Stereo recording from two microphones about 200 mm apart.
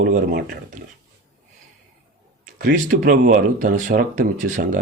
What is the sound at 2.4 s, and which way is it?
Speech, 45° right (ahead or behind).